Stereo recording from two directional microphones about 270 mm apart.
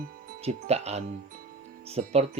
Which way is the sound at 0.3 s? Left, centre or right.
Right.